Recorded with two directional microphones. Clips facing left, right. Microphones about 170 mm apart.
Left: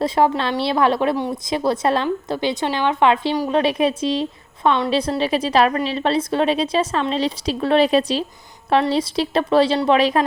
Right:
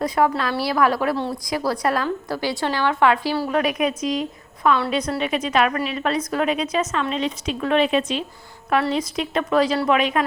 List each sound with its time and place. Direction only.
0.0 s a woman's voice: 25° left (ahead or behind)